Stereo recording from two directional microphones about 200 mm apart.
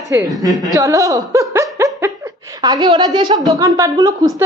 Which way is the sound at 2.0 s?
15° right (ahead or behind).